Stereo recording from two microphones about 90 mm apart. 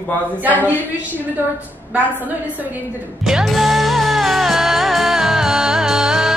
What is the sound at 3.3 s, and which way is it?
Music, centre (ahead or behind).